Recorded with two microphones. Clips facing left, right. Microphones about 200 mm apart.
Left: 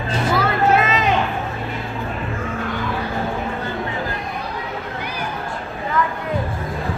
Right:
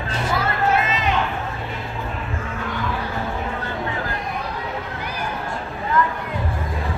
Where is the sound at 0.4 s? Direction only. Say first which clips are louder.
Left 3 dB; 90° left.